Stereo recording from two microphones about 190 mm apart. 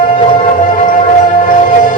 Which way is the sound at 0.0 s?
40° left (ahead or behind).